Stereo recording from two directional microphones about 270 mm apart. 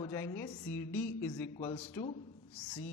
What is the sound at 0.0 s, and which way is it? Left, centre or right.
A man's voice, centre.